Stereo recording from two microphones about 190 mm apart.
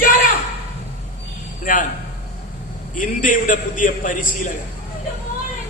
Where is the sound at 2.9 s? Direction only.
45° left (ahead or behind).